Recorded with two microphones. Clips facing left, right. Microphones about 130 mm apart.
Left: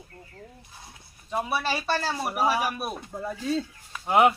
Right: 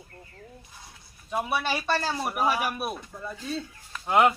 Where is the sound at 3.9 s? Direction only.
10° left (ahead or behind).